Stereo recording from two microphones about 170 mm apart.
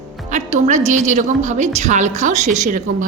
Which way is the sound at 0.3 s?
45° right (ahead or behind).